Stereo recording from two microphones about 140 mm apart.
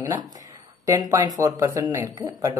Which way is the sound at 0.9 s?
25° right (ahead or behind).